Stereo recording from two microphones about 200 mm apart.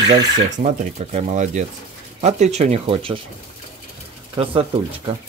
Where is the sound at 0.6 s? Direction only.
35° right (ahead or behind).